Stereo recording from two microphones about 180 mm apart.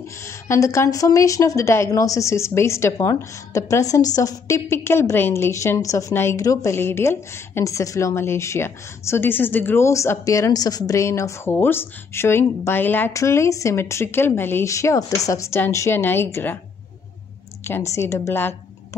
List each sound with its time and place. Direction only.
0.2 s a woman's voice: 15° left (ahead or behind)
17.6 s a woman's voice: 15° left (ahead or behind)